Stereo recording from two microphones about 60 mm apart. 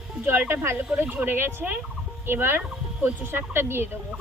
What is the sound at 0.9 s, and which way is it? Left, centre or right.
Speech, right.